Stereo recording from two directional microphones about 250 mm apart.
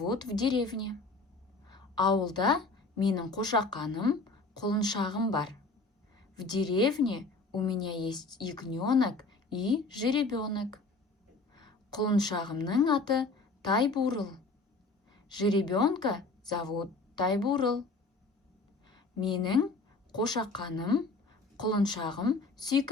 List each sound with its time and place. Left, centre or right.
0.0 s a woman's voice: centre
18.9 s a woman's voice: centre